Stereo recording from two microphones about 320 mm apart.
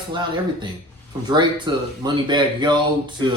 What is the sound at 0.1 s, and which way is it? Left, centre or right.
A man's voice, centre.